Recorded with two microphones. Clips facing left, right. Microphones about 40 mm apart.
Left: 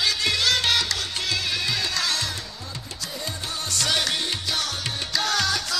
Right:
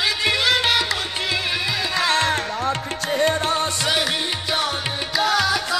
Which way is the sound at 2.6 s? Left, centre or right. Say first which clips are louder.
Right 13 dB; right.